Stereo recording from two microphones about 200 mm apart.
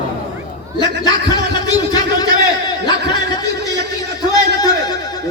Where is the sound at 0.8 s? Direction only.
20° left (ahead or behind).